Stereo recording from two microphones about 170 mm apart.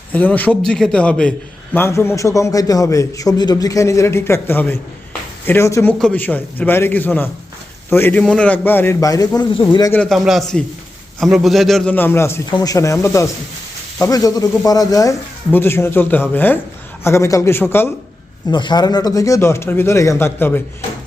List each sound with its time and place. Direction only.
0.1 s a man's voice: 10° left (ahead or behind)
9.9 s a man's voice: 5° left (ahead or behind)
11.9 s a man's voice: 15° left (ahead or behind)
18.5 s speech: 25° left (ahead or behind)